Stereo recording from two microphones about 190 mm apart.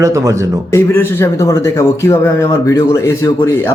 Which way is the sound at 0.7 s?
10° left (ahead or behind).